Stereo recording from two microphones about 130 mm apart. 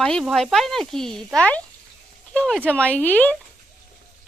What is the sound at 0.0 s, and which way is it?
A woman's voice, 5° left (ahead or behind).